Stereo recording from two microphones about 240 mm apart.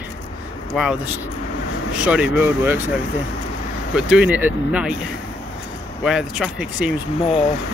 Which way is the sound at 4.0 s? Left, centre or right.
Centre.